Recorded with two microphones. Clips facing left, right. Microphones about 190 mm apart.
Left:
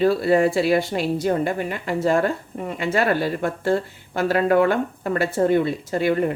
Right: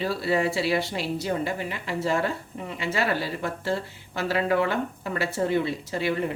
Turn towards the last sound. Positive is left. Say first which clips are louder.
# left 6 dB
turn(degrees=50)  # may be behind; listen again after turning